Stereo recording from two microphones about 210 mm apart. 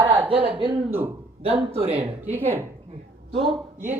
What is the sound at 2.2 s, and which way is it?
Speech, 10° right (ahead or behind).